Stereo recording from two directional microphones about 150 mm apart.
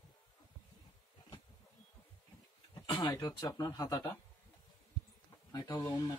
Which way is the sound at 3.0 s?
25° left (ahead or behind).